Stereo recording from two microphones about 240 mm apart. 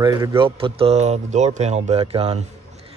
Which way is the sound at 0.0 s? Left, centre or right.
Centre.